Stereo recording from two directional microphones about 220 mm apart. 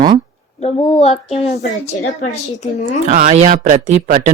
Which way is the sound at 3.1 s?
35° right (ahead or behind).